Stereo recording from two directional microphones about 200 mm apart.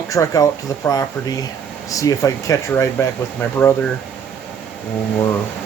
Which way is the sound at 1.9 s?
15° left (ahead or behind).